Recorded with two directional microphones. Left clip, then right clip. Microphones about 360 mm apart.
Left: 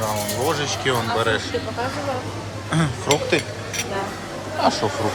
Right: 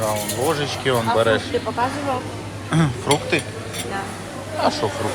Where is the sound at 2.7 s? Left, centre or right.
Centre.